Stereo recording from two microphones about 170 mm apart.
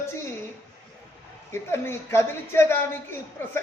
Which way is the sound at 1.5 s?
15° left (ahead or behind).